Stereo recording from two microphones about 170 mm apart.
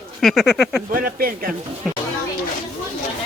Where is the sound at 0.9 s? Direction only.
60° right (ahead or behind).